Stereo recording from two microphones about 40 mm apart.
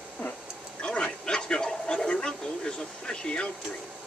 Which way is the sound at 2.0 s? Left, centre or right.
Left.